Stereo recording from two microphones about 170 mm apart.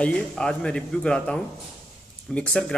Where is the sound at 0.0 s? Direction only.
5° left (ahead or behind).